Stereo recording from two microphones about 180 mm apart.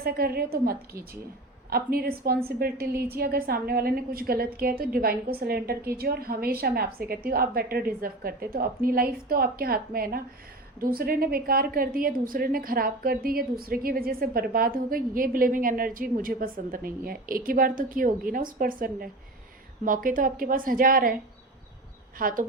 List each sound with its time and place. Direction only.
0.0 s a woman's voice: 60° right (ahead or behind)
22.2 s a woman's voice: 50° right (ahead or behind)